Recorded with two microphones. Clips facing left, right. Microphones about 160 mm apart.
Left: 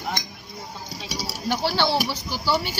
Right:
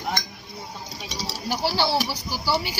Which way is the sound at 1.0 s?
10° left (ahead or behind).